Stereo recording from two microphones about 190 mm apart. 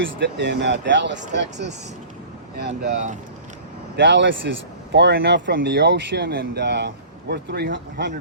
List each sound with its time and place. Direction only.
0.0 s speech: 65° right (ahead or behind)
3.9 s speech: 70° right (ahead or behind)